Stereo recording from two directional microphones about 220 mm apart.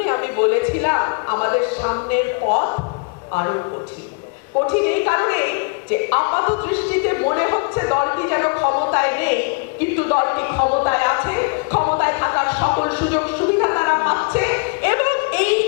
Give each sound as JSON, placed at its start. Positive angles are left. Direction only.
{"t": 0.0, "sound": "a man's voice", "side_deg": 15}
{"t": 4.6, "sound": "a woman's voice", "side_deg": 15}
{"t": 10.6, "sound": "speech", "side_deg": 30}
{"t": 10.8, "sound": "a sound", "side_deg": 15}
{"t": 11.9, "sound": "music", "side_deg": 15}
{"t": 13.1, "sound": "a sound", "side_deg": 15}